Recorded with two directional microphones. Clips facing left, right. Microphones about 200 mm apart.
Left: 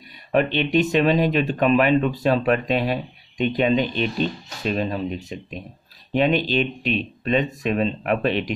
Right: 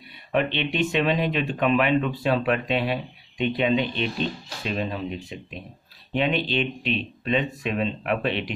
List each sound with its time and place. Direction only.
0.3 s speech: 40° left (ahead or behind)